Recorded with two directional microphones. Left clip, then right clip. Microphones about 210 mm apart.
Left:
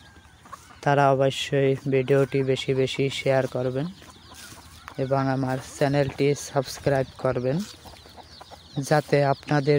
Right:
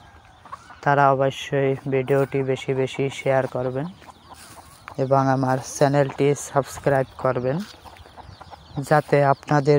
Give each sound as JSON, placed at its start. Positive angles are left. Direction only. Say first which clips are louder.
{"t": 0.7, "sound": "speech", "louder": "right 2 dB", "side_deg": 15}
{"t": 5.0, "sound": "speech", "louder": "right 6 dB", "side_deg": -10}
{"t": 8.8, "sound": "speech", "louder": "right 4 dB", "side_deg": 0}